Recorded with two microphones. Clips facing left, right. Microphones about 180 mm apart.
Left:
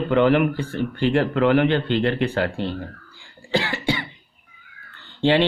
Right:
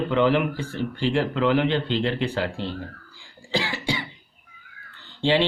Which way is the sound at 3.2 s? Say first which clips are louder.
Left 4 dB; 55° left (ahead or behind).